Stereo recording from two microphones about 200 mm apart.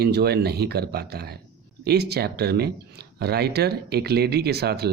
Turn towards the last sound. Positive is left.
turn(degrees=-55)  # may be behind; listen again after turning